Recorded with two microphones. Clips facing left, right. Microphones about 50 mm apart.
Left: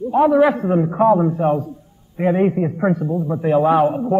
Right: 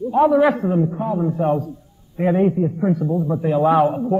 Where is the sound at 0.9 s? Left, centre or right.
Left.